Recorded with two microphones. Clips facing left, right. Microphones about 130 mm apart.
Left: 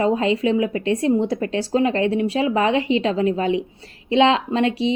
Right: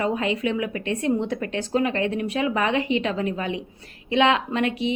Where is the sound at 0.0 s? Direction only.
30° left (ahead or behind).